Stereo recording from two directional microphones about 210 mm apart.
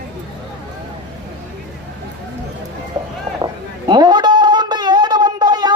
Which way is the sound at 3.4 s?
20° right (ahead or behind).